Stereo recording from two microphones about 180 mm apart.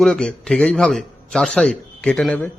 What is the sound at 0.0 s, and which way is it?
Speech, 5° left (ahead or behind).